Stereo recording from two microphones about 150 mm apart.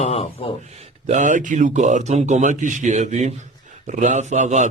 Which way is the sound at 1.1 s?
55° right (ahead or behind).